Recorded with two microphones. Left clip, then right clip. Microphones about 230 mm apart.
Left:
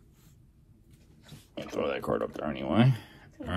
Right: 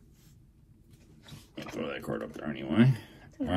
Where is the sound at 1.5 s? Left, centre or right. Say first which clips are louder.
Left 5 dB; left.